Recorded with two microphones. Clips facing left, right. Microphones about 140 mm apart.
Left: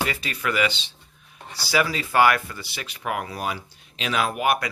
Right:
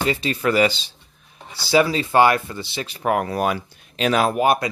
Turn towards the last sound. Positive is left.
turn(degrees=-30)  # may be behind; listen again after turning